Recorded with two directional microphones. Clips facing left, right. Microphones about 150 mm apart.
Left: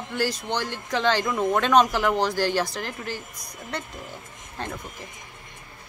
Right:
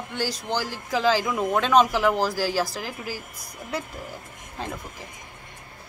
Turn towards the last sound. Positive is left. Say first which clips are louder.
# even
turn(degrees=0)  # may be behind; listen again after turning